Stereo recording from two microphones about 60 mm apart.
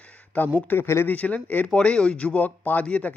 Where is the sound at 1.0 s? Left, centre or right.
Left.